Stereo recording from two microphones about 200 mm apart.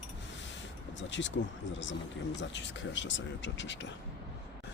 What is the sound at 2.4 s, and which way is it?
Speech, 65° left (ahead or behind).